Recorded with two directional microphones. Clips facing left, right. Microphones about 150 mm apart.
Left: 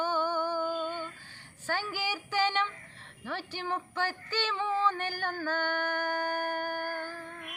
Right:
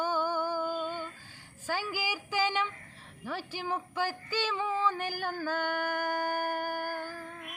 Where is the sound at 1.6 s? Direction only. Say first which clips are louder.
Even; 10° right (ahead or behind).